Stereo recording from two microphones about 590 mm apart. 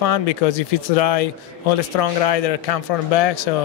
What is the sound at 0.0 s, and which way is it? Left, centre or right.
Speech, left.